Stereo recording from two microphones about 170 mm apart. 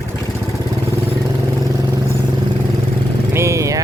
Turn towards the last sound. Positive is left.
turn(degrees=-20)  # may be behind; listen again after turning